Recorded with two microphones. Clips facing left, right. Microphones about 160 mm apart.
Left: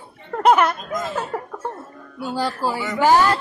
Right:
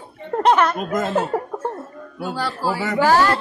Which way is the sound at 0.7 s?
60° right (ahead or behind).